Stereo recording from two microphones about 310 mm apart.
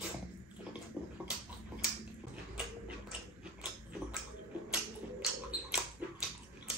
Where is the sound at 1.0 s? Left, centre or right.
Centre.